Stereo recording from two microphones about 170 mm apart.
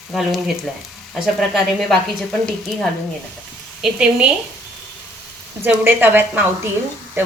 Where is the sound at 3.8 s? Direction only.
5° right (ahead or behind).